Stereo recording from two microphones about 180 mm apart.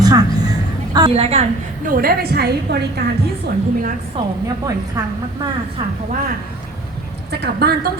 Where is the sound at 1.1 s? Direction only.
35° right (ahead or behind).